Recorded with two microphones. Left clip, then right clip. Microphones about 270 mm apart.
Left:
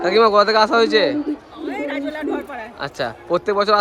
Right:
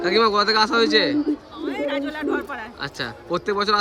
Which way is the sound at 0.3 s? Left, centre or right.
Centre.